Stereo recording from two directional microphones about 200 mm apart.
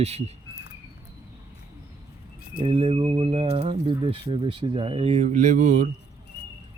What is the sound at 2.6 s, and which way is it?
Speech, 25° right (ahead or behind).